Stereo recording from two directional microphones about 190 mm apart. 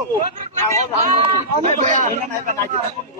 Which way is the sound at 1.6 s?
40° right (ahead or behind).